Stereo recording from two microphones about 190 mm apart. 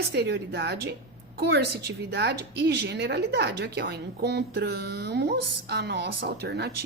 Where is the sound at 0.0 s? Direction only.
60° right (ahead or behind).